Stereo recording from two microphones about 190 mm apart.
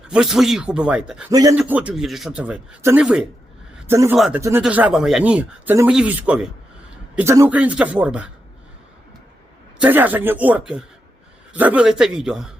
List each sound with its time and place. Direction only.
0.1 s speech: centre (ahead or behind)
1.3 s speech: 20° right (ahead or behind)
1.5 s a man's voice: 5° right (ahead or behind)
9.8 s speech: 10° right (ahead or behind)